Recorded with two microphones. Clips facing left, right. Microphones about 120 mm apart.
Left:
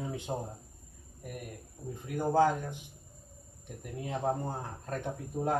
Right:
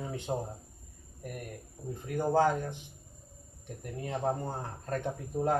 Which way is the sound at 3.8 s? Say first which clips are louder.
Even; 5° left (ahead or behind).